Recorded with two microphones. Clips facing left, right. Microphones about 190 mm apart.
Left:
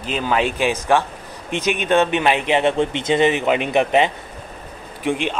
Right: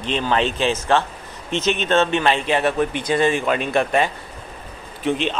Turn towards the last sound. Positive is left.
turn(degrees=15)  # may be behind; listen again after turning